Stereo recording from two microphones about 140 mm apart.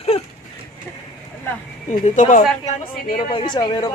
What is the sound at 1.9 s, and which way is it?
Speech, 65° left (ahead or behind).